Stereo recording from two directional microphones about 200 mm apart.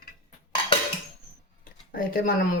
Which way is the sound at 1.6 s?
45° left (ahead or behind).